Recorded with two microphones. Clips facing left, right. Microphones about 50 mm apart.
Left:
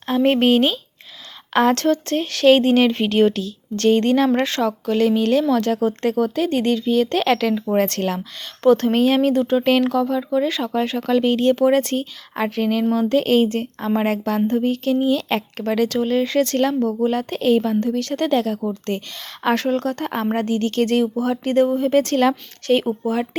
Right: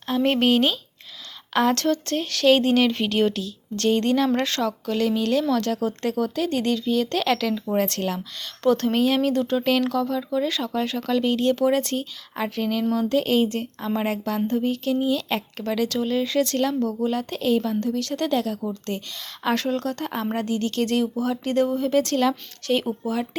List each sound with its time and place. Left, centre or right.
0.1 s speech: left
4.3 s speech: left
8.6 s speech: left
9.3 s a woman's voice: left